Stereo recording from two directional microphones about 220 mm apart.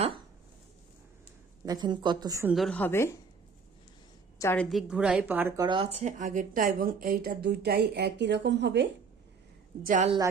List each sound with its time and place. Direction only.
1.6 s a woman's voice: 20° right (ahead or behind)
2.5 s a woman's voice: centre (ahead or behind)
4.4 s a woman's voice: 10° left (ahead or behind); by 8.9 s 50° right (ahead or behind)
9.8 s a woman's voice: 35° right (ahead or behind)